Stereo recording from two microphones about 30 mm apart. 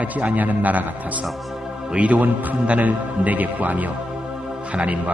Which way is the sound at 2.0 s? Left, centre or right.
Right.